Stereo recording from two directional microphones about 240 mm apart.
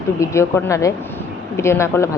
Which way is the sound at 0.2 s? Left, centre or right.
Centre.